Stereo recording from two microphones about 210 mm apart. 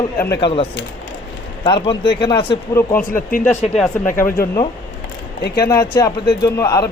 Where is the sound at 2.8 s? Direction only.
15° left (ahead or behind).